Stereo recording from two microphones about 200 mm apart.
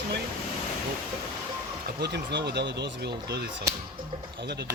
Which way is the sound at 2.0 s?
55° right (ahead or behind).